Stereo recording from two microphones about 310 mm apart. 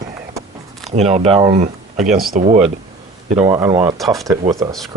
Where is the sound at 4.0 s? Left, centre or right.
Centre.